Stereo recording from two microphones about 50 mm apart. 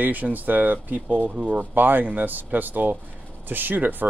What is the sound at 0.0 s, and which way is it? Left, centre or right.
Speech, right.